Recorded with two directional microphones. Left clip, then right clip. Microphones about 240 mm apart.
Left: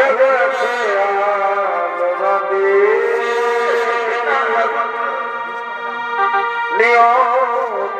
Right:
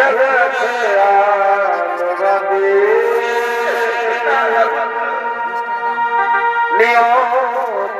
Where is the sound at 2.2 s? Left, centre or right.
Right.